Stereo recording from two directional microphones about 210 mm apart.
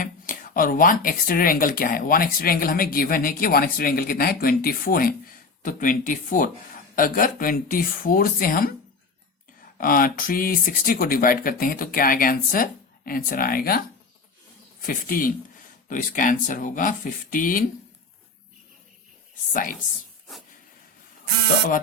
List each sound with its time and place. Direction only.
0.0 s speech: 40° left (ahead or behind)